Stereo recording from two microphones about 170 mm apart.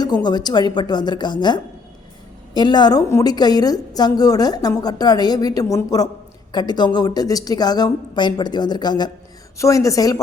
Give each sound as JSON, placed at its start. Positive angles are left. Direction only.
{"t": 0.0, "sound": "a woman's voice", "side_deg": 25}